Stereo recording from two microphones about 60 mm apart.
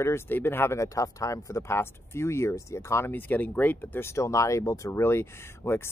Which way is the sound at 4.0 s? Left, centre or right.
Left.